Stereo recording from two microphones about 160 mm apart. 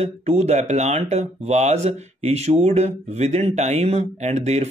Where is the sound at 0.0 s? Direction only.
40° right (ahead or behind).